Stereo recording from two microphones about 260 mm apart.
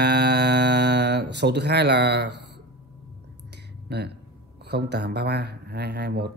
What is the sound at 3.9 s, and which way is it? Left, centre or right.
Speech, right.